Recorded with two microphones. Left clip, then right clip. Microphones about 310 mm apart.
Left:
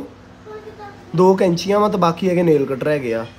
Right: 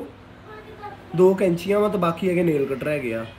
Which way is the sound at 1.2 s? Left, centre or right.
Left.